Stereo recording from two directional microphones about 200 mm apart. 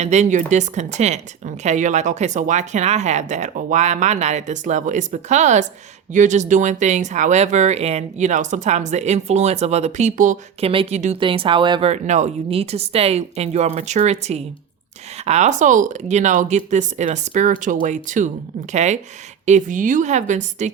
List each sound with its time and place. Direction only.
0.0 s speech: 35° right (ahead or behind)